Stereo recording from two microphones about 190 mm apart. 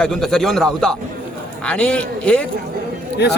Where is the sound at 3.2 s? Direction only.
60° left (ahead or behind).